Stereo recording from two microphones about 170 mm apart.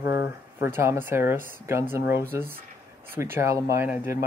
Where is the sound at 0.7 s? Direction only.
15° right (ahead or behind).